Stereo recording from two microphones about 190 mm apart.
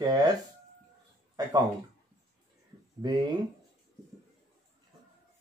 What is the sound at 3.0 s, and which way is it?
Speech, 20° right (ahead or behind).